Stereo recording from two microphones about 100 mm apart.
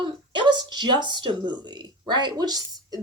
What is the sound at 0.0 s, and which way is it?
A woman's voice, 50° right (ahead or behind).